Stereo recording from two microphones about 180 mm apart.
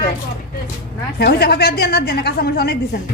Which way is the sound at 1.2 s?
65° left (ahead or behind).